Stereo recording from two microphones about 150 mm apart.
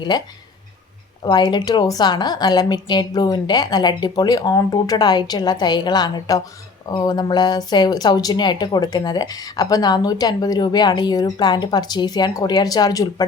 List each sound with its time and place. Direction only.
0.1 s speech: 30° left (ahead or behind)